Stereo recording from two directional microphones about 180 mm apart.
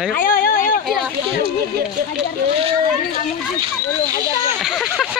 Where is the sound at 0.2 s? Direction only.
50° left (ahead or behind).